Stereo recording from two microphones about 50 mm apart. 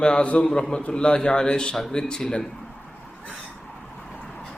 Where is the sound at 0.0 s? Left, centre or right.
Centre.